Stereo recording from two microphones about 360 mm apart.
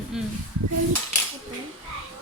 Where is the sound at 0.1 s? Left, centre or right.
Centre.